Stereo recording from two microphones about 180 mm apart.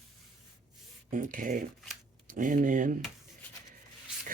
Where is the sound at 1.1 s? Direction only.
50° right (ahead or behind).